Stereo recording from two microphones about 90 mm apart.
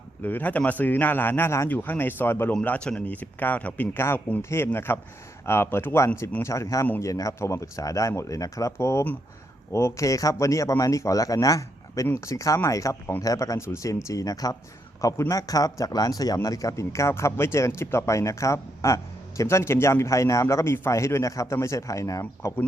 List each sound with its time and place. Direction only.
0.2 s speech: 20° left (ahead or behind)
2.5 s a man's voice: 15° left (ahead or behind); by 22.6 s 35° left (ahead or behind)